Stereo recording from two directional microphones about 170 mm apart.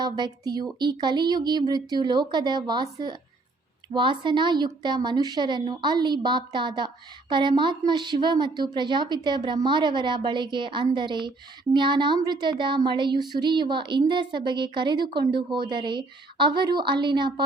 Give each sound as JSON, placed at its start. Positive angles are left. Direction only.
{"t": 0.0, "sound": "a woman's voice", "side_deg": -25}